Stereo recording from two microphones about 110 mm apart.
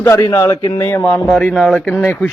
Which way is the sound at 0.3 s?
35° left (ahead or behind).